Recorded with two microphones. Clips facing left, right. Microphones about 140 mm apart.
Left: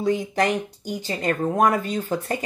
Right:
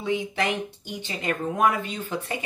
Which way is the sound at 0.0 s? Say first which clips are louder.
Left 4 dB; 40° left (ahead or behind).